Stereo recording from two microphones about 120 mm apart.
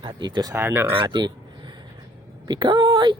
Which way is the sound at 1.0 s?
40° right (ahead or behind).